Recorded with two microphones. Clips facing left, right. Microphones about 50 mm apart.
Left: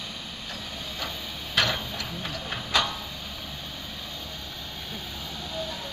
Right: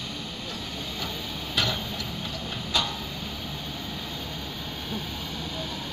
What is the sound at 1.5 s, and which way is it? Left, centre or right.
Tick-tock, left.